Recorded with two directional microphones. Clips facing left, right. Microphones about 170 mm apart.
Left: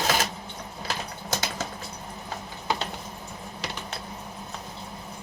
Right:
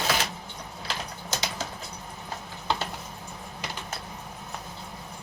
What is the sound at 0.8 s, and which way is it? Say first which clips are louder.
Typing: left 2 dB; 50° left (ahead or behind).